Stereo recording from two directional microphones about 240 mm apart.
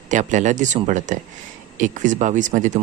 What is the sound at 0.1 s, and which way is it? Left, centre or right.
Speech, right.